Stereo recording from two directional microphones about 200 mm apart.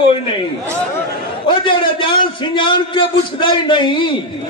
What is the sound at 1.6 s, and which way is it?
A man's voice, 25° left (ahead or behind).